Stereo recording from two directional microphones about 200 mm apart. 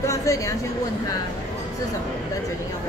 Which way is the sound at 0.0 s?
15° left (ahead or behind).